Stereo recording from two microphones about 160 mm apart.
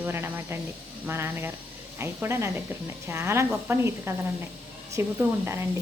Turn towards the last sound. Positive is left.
turn(degrees=-15)  # may be behind; listen again after turning